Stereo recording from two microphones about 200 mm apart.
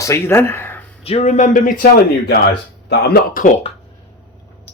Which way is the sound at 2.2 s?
55° left (ahead or behind).